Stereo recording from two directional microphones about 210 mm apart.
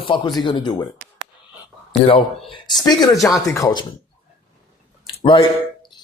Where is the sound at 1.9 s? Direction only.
25° left (ahead or behind).